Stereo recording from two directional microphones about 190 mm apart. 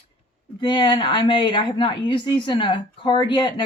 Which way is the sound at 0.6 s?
25° left (ahead or behind).